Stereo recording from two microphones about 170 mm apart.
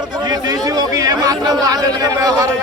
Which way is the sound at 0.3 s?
20° right (ahead or behind).